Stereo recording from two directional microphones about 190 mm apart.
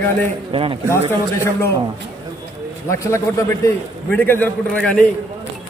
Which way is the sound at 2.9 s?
15° left (ahead or behind).